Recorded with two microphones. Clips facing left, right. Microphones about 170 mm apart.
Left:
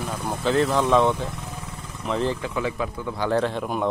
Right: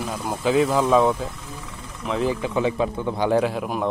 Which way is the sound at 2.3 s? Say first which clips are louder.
Right 4 dB; 20° right (ahead or behind).